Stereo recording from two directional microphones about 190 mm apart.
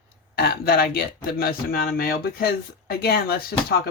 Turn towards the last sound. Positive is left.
turn(degrees=55)  # may be behind; listen again after turning